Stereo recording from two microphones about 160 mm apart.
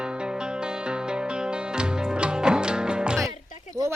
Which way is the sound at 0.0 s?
5° right (ahead or behind).